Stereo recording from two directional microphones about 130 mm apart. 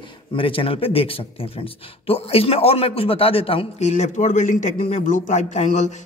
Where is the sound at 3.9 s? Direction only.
65° left (ahead or behind).